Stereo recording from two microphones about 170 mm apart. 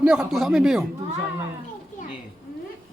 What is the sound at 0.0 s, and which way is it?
Speech, 5° right (ahead or behind).